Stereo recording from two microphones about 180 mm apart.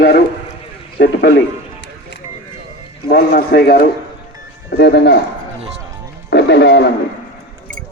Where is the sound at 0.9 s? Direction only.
65° left (ahead or behind).